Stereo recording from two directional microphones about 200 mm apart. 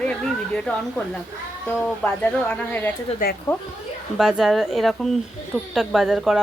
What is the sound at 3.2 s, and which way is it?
Speech, 45° left (ahead or behind).